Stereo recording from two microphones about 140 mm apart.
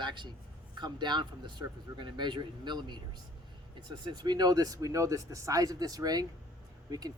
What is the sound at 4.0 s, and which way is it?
Speech, 30° right (ahead or behind).